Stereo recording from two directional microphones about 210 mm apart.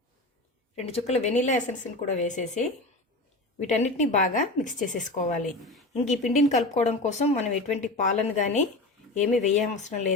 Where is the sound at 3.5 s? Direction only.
35° left (ahead or behind).